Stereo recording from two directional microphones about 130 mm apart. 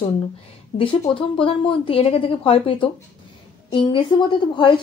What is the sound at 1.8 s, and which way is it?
A woman's voice, 45° left (ahead or behind).